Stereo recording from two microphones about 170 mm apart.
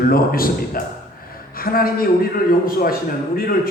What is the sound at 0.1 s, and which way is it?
A man's voice, 60° left (ahead or behind).